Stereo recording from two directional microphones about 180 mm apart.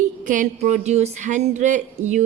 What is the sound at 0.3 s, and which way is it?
Speech, 45° right (ahead or behind).